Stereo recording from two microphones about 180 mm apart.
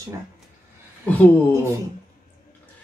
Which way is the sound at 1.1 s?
10° left (ahead or behind).